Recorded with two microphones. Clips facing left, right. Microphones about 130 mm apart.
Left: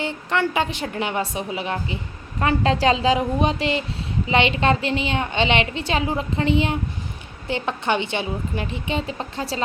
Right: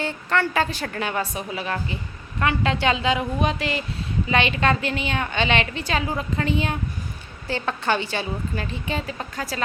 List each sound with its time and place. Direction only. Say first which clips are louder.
0.0 s a woman's voice: left 1 dB; 20° left (ahead or behind)
2.4 s a woman's voice: left 3 dB; 35° left (ahead or behind)